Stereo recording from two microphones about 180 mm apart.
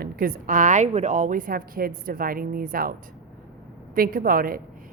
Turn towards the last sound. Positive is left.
turn(degrees=-50)  # may be behind; listen again after turning